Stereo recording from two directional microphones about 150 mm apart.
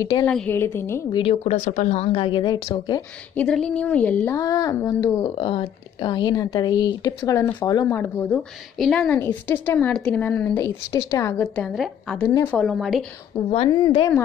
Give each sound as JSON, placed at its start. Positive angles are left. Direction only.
{"t": 0.0, "sound": "speech", "side_deg": 20}
{"t": 0.3, "sound": "a woman's voice", "side_deg": 5}
{"t": 0.6, "sound": "speech", "side_deg": 15}
{"t": 1.1, "sound": "speech", "side_deg": 40}
{"t": 3.3, "sound": "speech", "side_deg": 5}
{"t": 4.4, "sound": "speech", "side_deg": 25}
{"t": 8.0, "sound": "speech", "side_deg": 10}
{"t": 8.7, "sound": "a woman's voice", "side_deg": 0}
{"t": 11.4, "sound": "a woman's voice", "side_deg": 5}
{"t": 13.7, "sound": "speech", "side_deg": 30}